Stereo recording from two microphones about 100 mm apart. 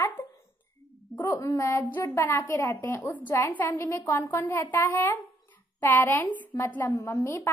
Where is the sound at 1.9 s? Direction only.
20° left (ahead or behind).